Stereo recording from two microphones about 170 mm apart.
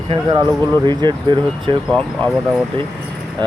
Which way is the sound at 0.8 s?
25° right (ahead or behind).